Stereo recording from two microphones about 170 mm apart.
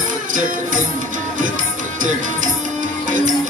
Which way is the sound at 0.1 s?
50° right (ahead or behind).